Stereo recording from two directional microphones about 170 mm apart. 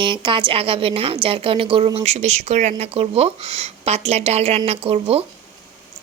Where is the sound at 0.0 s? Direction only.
30° right (ahead or behind).